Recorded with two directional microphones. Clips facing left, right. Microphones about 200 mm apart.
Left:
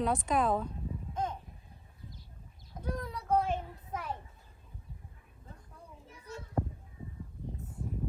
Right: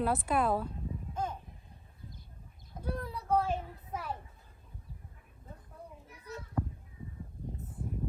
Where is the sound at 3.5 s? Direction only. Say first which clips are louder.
Even; 5° right (ahead or behind).